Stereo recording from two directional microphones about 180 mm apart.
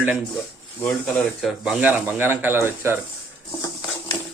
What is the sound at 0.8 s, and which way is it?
Speech, 5° left (ahead or behind).